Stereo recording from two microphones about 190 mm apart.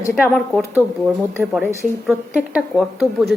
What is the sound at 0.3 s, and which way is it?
Speech, 5° left (ahead or behind).